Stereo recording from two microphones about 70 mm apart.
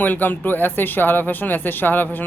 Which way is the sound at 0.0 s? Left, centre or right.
Left.